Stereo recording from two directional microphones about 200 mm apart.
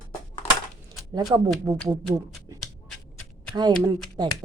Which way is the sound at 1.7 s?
15° right (ahead or behind).